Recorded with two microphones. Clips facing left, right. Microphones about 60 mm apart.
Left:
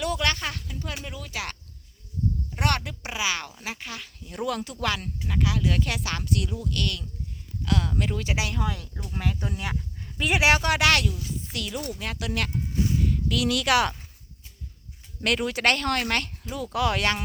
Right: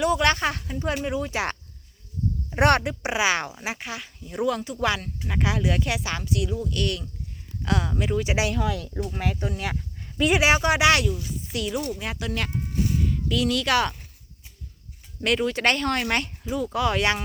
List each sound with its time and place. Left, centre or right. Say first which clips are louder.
0.0 s speech: right 6 dB; right
2.6 s speech: right 8 dB; right; by 5.4 s centre
5.4 s speech: right 2 dB; right
5.7 s speech: right 2 dB; centre
6.6 s speech: right 3 dB; centre
9.4 s speech: right 2 dB; centre
15.2 s speech: right 2 dB; centre